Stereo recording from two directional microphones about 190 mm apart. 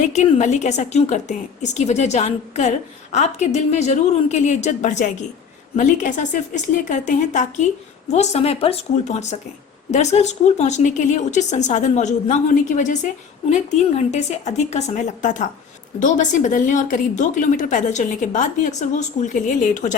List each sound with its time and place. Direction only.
0.1 s a woman's voice: 35° left (ahead or behind)
14.1 s a woman's voice: 35° left (ahead or behind)